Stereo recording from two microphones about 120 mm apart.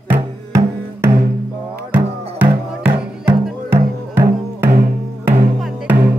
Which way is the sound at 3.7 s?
20° right (ahead or behind).